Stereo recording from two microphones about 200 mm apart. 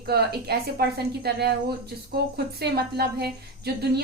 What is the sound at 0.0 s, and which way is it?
A woman's voice, 50° right (ahead or behind).